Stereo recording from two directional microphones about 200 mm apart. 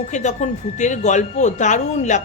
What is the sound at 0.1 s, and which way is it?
A woman's voice, 35° left (ahead or behind).